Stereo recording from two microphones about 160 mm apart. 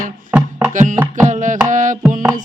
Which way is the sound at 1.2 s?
50° right (ahead or behind).